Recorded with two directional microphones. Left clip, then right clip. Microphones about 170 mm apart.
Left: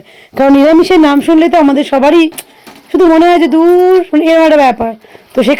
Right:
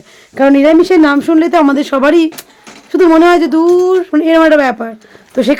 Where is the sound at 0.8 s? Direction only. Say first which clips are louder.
Left 1 dB; 15° left (ahead or behind).